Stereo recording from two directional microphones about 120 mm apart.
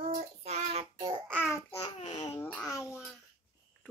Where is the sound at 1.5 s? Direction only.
25° left (ahead or behind).